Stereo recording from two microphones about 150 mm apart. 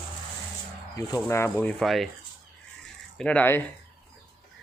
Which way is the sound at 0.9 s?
20° left (ahead or behind).